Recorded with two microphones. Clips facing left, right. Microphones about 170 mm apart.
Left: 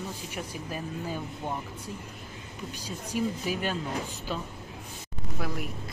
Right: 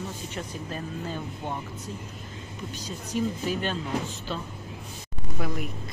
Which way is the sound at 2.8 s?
10° left (ahead or behind).